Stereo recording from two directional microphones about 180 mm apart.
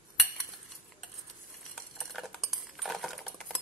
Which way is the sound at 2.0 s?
Centre (ahead or behind).